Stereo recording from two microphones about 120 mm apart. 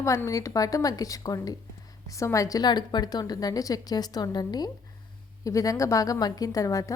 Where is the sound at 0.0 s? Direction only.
25° left (ahead or behind).